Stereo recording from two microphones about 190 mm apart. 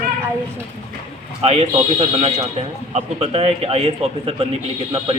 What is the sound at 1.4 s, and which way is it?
A man's voice, 35° right (ahead or behind).